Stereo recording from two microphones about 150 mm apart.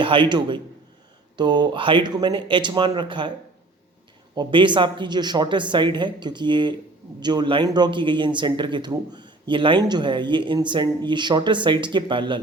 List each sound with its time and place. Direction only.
0.0 s speech: 35° right (ahead or behind)
4.4 s speech: 30° right (ahead or behind)